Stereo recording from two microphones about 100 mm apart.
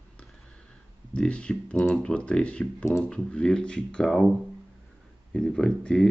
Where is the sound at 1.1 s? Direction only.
10° left (ahead or behind).